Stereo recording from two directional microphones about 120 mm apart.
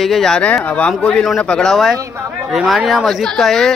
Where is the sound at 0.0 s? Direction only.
5° left (ahead or behind).